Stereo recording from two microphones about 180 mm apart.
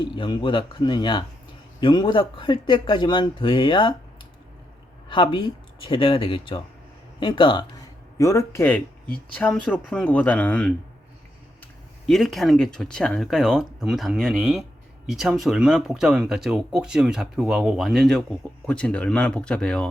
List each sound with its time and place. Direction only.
0.0 s speech: 25° left (ahead or behind)
5.0 s speech: 25° left (ahead or behind)
8.2 s speech: 15° left (ahead or behind)
12.0 s speech: centre (ahead or behind)